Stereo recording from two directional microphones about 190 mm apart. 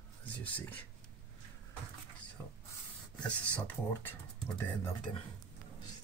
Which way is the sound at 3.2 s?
5° left (ahead or behind).